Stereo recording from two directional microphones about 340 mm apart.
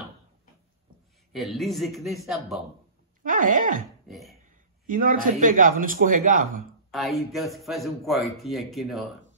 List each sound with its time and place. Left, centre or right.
1.3 s speech: centre
3.3 s speech: right
4.1 s a sound: centre
4.8 s speech: right
6.9 s speech: centre